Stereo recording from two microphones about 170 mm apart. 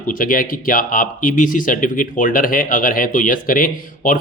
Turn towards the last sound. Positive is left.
turn(degrees=50)  # may be behind; listen again after turning